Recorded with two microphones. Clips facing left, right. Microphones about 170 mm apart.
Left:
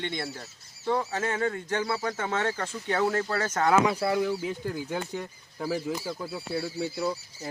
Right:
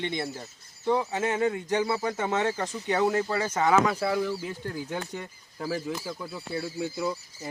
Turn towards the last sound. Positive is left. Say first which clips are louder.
# even
turn(degrees=5)  # may be behind; listen again after turning